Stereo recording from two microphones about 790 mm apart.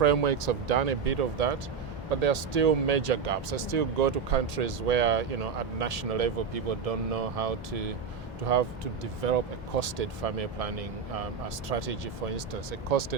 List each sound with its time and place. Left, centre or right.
0.0 s speech: right